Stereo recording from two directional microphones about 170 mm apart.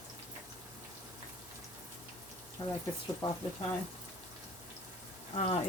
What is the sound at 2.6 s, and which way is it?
Speech, 20° left (ahead or behind).